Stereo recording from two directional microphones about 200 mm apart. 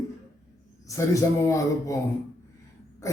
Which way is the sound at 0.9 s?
15° left (ahead or behind).